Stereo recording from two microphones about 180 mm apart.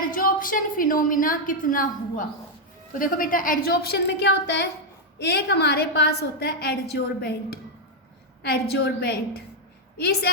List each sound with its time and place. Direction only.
0.1 s a woman's voice: 50° left (ahead or behind)